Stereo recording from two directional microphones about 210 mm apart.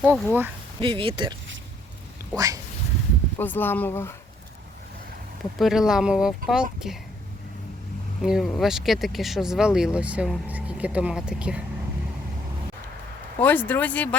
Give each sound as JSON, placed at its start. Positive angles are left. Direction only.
{"t": 0.0, "sound": "speech", "side_deg": -5}
{"t": 0.8, "sound": "speech", "side_deg": -25}
{"t": 2.3, "sound": "speech", "side_deg": -15}
{"t": 3.3, "sound": "speech", "side_deg": 10}
{"t": 5.5, "sound": "speech", "side_deg": 0}
{"t": 8.2, "sound": "speech", "side_deg": 0}
{"t": 13.4, "sound": "speech", "side_deg": 10}